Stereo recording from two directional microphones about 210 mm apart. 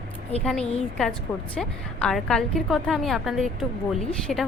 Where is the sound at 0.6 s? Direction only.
30° left (ahead or behind).